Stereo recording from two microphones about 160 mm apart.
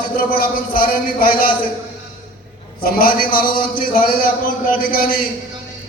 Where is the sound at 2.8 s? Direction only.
65° left (ahead or behind).